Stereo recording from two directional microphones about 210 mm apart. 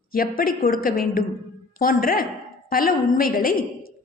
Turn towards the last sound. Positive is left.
turn(degrees=45)  # may be behind; listen again after turning